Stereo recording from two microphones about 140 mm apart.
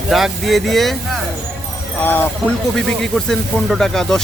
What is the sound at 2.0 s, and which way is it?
Speech, 15° left (ahead or behind).